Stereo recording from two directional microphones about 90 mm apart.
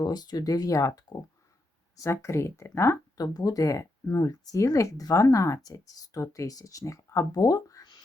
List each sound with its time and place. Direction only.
0.0 s speech: 50° left (ahead or behind); by 3.0 s 30° left (ahead or behind)
3.2 s speech: 45° left (ahead or behind)